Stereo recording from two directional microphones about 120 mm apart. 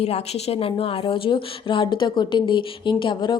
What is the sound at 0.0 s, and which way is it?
A woman's voice, 60° left (ahead or behind).